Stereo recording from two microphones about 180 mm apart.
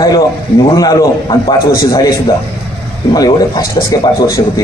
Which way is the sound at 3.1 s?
20° left (ahead or behind).